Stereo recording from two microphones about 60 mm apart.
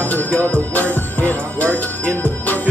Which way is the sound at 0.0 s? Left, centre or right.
Left.